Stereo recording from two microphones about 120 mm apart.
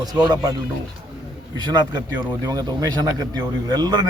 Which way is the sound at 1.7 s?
35° right (ahead or behind).